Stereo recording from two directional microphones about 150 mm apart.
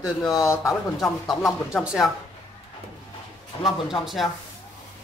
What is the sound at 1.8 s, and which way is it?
Speech, centre (ahead or behind).